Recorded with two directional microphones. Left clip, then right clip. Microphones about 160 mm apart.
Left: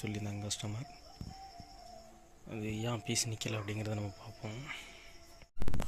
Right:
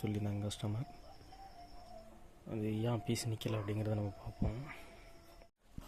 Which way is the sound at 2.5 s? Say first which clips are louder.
Right 1 dB; 20° right (ahead or behind).